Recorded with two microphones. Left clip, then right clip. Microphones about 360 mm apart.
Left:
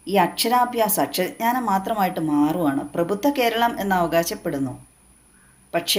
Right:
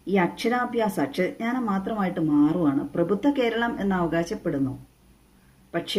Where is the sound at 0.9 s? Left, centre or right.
Left.